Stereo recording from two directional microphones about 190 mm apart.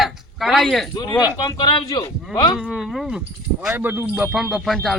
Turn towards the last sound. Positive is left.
turn(degrees=0)  # may be behind; listen again after turning